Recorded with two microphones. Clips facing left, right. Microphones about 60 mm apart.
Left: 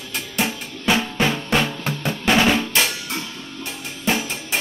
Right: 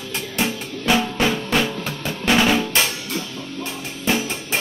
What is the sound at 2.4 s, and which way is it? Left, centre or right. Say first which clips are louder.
Drum: even; centre.